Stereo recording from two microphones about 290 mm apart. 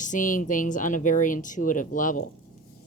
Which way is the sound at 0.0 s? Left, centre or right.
Left.